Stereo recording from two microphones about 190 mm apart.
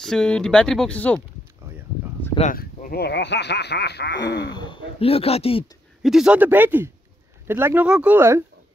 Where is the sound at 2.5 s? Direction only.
50° left (ahead or behind).